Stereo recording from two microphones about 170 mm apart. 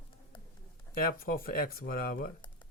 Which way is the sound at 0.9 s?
60° left (ahead or behind).